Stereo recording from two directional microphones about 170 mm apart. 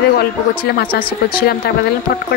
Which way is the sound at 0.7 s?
60° left (ahead or behind).